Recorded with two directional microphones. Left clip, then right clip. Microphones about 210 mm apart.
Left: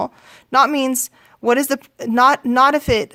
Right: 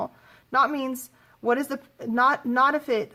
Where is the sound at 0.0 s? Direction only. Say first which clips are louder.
Left 8 dB; 50° left (ahead or behind).